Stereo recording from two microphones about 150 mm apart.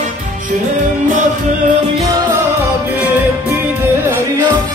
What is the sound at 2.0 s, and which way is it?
Music, 20° right (ahead or behind).